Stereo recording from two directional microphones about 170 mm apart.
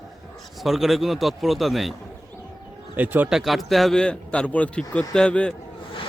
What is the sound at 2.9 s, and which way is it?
A man's voice, 10° right (ahead or behind).